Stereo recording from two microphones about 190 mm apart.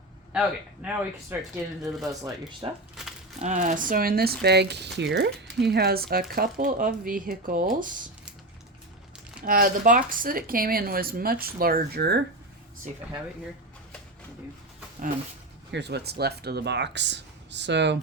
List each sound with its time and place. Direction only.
0.3 s a man's voice: 10° right (ahead or behind)
2.2 s speech: 25° right (ahead or behind)
3.0 s a sound: centre (ahead or behind)
3.4 s speech: 40° right (ahead or behind)
9.4 s speech: 45° right (ahead or behind)
15.7 s speech: 60° right (ahead or behind)